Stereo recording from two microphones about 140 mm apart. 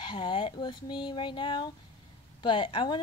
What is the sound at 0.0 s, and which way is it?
A woman's voice, 35° left (ahead or behind).